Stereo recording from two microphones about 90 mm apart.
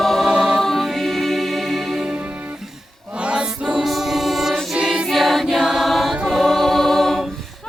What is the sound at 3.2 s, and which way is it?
Music, 10° right (ahead or behind).